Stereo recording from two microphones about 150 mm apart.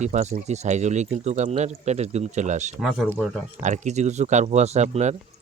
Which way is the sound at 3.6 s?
55° right (ahead or behind).